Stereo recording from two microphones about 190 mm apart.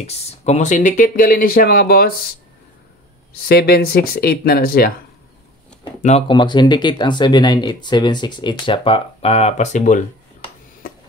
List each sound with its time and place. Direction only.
0.0 s speech: 35° left (ahead or behind); by 2.3 s 50° left (ahead or behind)
3.4 s speech: 55° left (ahead or behind)
6.2 s speech: 25° left (ahead or behind); by 10.0 s 40° left (ahead or behind)